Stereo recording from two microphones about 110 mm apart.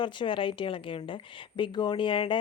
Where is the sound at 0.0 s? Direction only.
45° left (ahead or behind).